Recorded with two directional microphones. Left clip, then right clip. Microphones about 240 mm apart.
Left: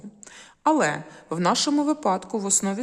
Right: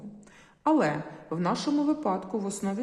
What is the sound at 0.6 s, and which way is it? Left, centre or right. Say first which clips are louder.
A woman's voice: left 4 dB; left.